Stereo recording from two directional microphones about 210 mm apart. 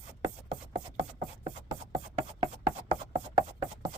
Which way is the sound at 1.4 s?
25° right (ahead or behind).